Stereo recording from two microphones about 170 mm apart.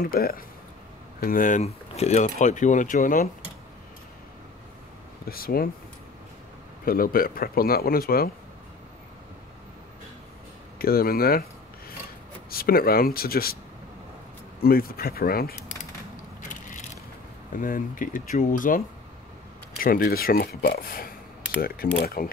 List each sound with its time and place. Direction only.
0.0 s speech: 60° left (ahead or behind)
5.3 s speech: 60° left (ahead or behind)
6.8 s speech: 60° left (ahead or behind)
10.8 s speech: 60° left (ahead or behind)
12.4 s speech: 60° left (ahead or behind)
14.6 s speech: 60° left (ahead or behind)
17.5 s speech: 50° left (ahead or behind)
19.8 s speech: 55° left (ahead or behind)